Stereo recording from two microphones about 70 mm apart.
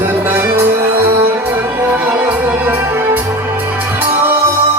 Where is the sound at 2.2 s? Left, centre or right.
Right.